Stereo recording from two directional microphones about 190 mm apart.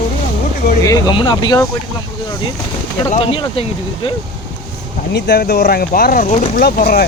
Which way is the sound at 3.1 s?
30° left (ahead or behind).